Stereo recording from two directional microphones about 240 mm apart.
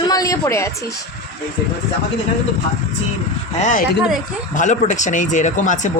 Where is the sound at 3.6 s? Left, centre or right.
Left.